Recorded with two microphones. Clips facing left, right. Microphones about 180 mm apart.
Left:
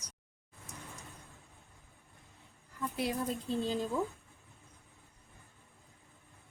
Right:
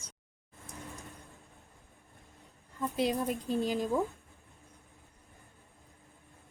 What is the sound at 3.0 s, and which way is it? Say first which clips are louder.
Speech: right 4 dB; 15° right (ahead or behind).